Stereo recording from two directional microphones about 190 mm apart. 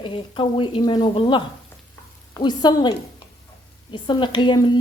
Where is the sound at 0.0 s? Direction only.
25° left (ahead or behind).